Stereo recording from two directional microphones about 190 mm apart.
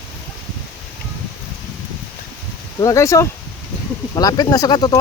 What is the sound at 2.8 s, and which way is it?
Speech, 15° left (ahead or behind).